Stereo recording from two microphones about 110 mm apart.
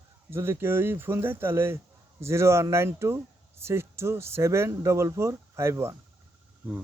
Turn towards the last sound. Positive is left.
turn(degrees=-25)  # may be behind; listen again after turning